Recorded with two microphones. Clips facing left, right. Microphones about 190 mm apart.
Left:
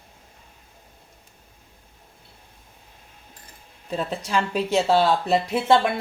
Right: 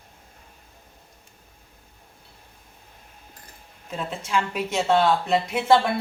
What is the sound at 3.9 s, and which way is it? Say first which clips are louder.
Speech: left 2 dB; 35° left (ahead or behind).